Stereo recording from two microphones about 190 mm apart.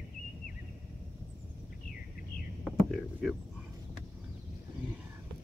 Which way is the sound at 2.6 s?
5° left (ahead or behind).